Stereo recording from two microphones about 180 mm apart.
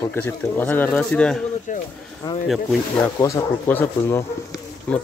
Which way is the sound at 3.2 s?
15° left (ahead or behind).